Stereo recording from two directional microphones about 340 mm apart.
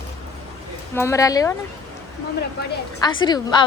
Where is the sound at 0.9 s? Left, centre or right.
Centre.